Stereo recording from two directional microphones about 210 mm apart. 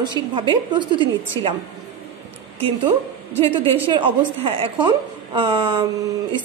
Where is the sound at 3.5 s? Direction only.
25° right (ahead or behind).